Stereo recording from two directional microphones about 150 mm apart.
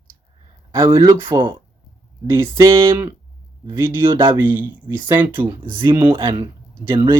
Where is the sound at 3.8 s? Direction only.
15° right (ahead or behind).